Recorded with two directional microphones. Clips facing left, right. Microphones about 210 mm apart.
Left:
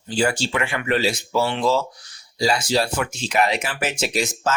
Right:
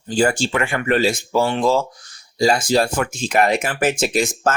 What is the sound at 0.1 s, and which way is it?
Speech, 50° right (ahead or behind).